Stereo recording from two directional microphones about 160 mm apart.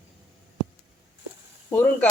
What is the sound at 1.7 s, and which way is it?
Speech, 15° left (ahead or behind).